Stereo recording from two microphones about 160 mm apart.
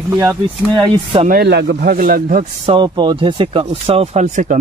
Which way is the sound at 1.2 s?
80° right.